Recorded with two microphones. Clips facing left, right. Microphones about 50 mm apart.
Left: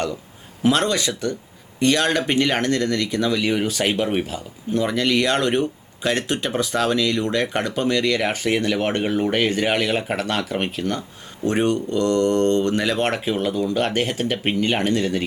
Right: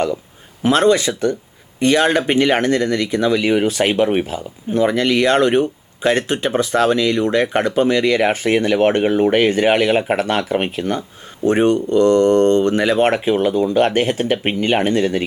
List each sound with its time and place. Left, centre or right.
0.7 s speech: centre